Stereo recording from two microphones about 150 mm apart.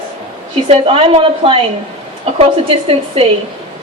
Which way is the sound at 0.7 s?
40° right (ahead or behind).